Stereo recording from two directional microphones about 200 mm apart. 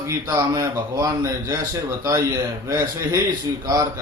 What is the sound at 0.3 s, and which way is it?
Mantra, 15° right (ahead or behind).